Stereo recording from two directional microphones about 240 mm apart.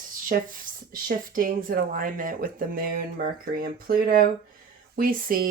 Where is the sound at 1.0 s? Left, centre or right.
Right.